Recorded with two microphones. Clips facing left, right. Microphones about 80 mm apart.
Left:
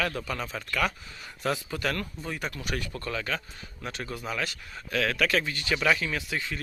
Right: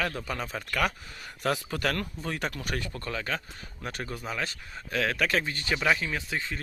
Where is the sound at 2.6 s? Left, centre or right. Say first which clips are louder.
Left 1 dB; right.